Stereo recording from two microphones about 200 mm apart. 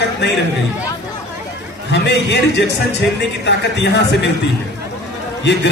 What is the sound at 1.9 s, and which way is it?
Speech, 60° left (ahead or behind).